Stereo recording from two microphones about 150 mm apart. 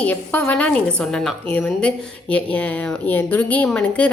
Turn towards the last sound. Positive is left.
turn(degrees=10)  # may be behind; listen again after turning